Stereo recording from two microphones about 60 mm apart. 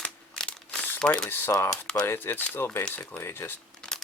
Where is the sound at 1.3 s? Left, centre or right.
Left.